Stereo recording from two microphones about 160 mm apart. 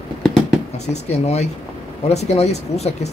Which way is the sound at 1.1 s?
45° left (ahead or behind).